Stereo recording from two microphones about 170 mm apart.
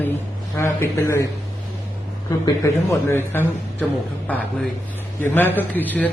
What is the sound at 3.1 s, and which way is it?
A woman's voice, 15° left (ahead or behind).